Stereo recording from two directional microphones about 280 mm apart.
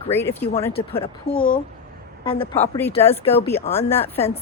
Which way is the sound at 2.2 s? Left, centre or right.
Centre.